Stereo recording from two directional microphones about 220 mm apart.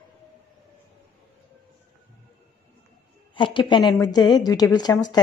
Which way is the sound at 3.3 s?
20° left (ahead or behind).